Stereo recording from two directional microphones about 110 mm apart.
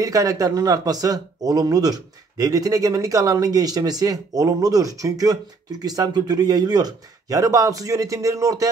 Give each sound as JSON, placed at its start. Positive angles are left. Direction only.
{"t": 0.0, "sound": "a man's voice", "side_deg": -30}